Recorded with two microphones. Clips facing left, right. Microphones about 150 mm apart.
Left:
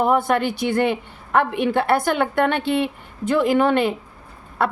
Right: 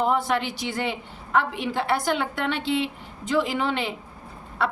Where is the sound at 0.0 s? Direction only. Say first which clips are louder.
Left 5 dB; 55° left (ahead or behind).